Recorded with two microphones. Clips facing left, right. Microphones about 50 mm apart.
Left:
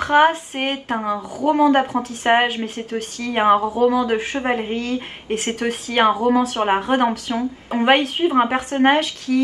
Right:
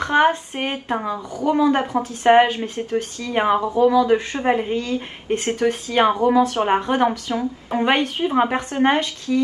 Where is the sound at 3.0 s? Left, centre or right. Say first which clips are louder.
Left 1 dB; left.